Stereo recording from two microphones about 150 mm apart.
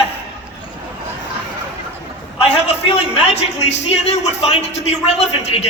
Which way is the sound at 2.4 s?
45° left (ahead or behind).